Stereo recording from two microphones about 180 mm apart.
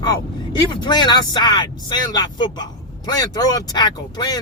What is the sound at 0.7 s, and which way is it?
Speech, 25° left (ahead or behind).